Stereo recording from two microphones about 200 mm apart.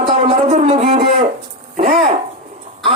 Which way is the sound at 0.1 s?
30° right (ahead or behind).